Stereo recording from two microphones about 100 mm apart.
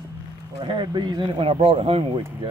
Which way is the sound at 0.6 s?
55° right (ahead or behind).